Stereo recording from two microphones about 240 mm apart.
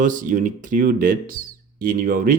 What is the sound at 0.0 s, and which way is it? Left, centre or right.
Speech, right.